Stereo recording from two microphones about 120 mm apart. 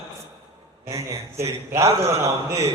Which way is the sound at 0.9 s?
25° right (ahead or behind).